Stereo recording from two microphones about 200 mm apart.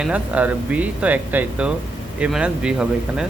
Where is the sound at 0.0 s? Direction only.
5° right (ahead or behind).